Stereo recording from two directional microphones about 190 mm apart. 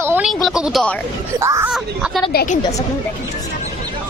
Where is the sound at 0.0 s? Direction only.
10° right (ahead or behind).